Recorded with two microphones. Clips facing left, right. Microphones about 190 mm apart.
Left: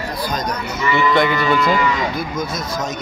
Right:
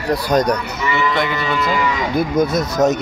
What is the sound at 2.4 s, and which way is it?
Speech, 60° right (ahead or behind).